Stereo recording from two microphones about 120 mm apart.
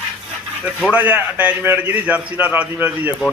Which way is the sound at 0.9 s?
15° right (ahead or behind).